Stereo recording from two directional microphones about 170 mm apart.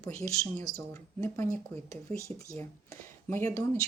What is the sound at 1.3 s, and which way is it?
Speech, 10° left (ahead or behind).